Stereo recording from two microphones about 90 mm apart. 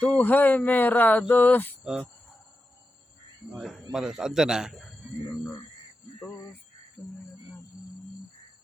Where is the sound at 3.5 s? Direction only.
5° right (ahead or behind).